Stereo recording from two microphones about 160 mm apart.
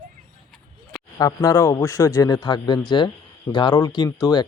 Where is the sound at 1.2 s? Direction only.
20° left (ahead or behind).